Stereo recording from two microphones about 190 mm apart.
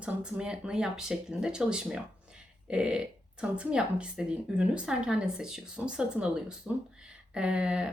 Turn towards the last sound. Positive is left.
turn(degrees=-5)  # may be behind; listen again after turning